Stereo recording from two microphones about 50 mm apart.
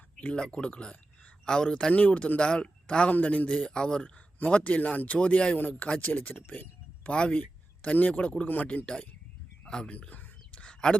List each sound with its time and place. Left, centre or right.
0.2 s speech: left
1.9 s speech: left
3.6 s speech: centre
4.4 s speech: left
5.5 s speech: left
7.1 s speech: left
9.9 s a sound: left